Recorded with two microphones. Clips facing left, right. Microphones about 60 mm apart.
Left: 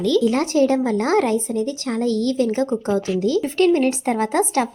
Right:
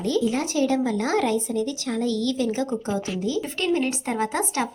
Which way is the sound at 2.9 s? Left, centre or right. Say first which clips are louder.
Left 6 dB; left.